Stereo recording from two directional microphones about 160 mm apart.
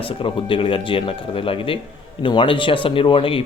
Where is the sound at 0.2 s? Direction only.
35° left (ahead or behind).